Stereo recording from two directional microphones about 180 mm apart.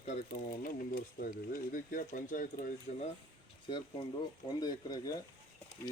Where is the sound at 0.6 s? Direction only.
55° left (ahead or behind).